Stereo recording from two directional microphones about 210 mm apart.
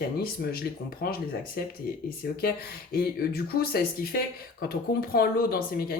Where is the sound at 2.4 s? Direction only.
45° left (ahead or behind).